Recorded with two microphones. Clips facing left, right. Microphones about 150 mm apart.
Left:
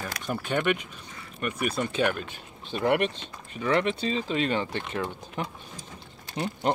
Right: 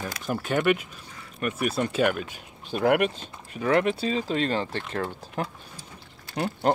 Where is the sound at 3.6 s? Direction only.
45° right (ahead or behind).